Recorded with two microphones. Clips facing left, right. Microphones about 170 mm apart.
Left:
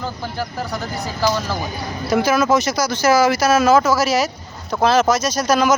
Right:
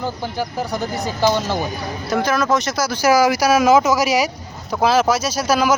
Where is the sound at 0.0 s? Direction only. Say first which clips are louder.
Right 2 dB; 15° right (ahead or behind).